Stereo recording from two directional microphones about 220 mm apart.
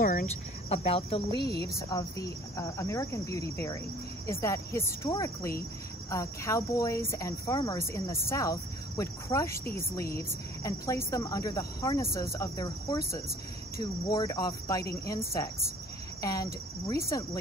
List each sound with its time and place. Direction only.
0.0 s speech: 35° left (ahead or behind)
1.9 s speech: 15° left (ahead or behind)